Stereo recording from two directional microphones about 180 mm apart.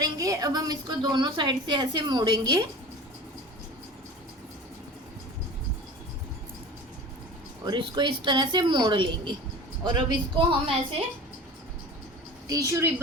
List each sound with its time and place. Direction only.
0.0 s a woman's voice: 20° right (ahead or behind)
7.6 s a woman's voice: 25° right (ahead or behind)
12.5 s speech: 20° right (ahead or behind)